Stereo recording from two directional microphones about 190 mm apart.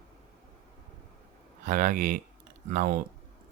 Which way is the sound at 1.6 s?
45° right (ahead or behind).